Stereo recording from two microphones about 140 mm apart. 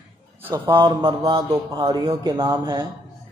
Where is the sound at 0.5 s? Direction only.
35° right (ahead or behind).